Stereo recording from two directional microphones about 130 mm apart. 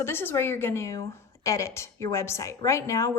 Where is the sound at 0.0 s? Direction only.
15° left (ahead or behind).